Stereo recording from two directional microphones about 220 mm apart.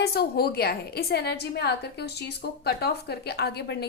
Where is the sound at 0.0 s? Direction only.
45° left (ahead or behind).